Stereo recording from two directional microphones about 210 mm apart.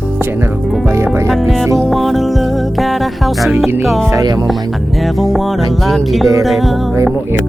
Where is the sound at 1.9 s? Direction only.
Centre (ahead or behind).